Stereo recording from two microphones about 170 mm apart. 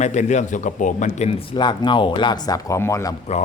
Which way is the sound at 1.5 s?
25° left (ahead or behind).